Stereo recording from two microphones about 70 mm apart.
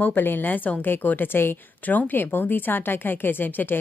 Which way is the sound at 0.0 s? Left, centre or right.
Left.